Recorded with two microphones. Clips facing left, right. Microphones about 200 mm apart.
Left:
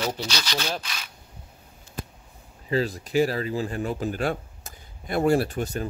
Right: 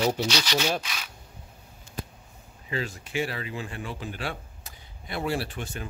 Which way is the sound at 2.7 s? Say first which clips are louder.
Left 7 dB; 35° left (ahead or behind).